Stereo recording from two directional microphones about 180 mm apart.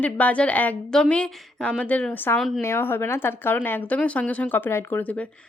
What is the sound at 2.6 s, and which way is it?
Speech, 15° left (ahead or behind).